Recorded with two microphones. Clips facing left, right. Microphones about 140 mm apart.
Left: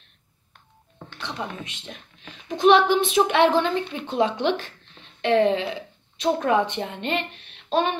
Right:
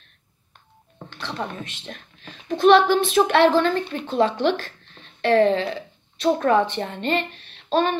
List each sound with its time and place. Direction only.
1.2 s a woman's voice: 15° left (ahead or behind)